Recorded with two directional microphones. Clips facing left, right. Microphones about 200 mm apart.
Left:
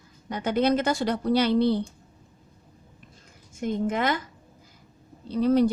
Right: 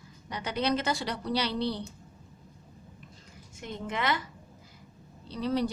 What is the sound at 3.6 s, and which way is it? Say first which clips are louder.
Speech: left 7 dB; 45° left (ahead or behind).